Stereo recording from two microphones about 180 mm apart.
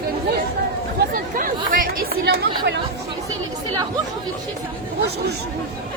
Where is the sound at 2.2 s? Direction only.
70° right (ahead or behind).